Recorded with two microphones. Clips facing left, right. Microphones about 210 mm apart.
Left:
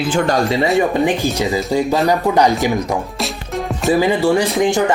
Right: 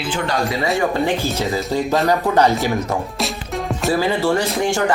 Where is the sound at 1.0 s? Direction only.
15° left (ahead or behind).